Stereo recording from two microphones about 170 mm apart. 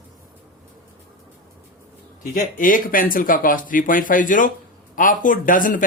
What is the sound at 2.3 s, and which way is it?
Speech, 55° left (ahead or behind).